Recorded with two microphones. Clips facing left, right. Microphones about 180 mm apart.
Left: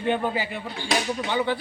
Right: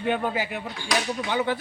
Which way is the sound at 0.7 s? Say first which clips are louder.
Left 2 dB; 25° left (ahead or behind).